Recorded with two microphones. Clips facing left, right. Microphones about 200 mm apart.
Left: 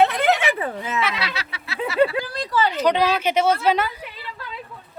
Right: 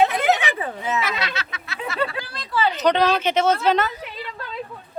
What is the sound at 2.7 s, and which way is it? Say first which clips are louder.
A woman's voice: right 2 dB; 10° left (ahead or behind).